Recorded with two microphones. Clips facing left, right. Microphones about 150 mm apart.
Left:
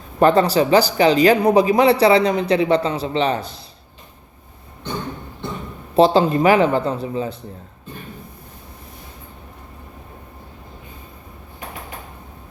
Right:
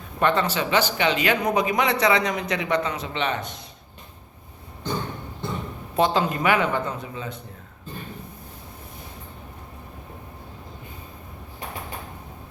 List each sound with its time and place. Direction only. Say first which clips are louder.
0.2 s a man's voice: left 8 dB; 35° left (ahead or behind)
6.0 s a man's voice: left 8 dB; 30° left (ahead or behind)